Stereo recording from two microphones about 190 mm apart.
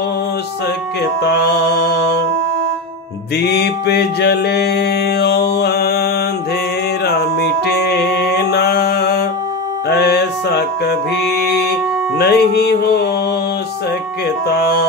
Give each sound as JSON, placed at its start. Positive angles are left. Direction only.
{"t": 1.2, "sound": "mantra", "side_deg": 60}
{"t": 3.3, "sound": "mantra", "side_deg": 60}
{"t": 7.1, "sound": "music", "side_deg": 60}
{"t": 12.2, "sound": "mantra", "side_deg": 60}
{"t": 14.5, "sound": "mantra", "side_deg": 60}